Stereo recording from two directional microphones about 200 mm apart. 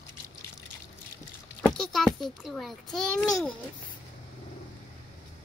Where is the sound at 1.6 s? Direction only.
Centre (ahead or behind).